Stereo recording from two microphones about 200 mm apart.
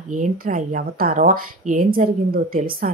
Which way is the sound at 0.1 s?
40° right (ahead or behind).